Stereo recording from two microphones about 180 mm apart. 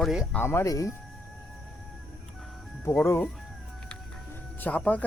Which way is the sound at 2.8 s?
15° left (ahead or behind).